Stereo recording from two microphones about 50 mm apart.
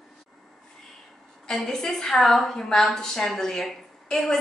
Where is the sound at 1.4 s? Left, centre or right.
Centre.